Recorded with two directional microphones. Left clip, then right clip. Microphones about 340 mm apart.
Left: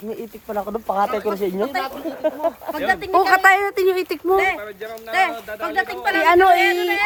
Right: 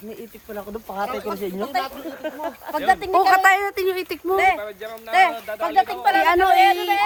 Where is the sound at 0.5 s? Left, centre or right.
Left.